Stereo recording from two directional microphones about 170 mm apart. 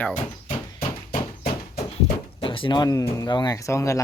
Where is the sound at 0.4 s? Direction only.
45° left (ahead or behind).